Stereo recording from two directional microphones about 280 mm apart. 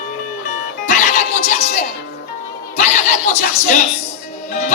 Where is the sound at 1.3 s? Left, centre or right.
Left.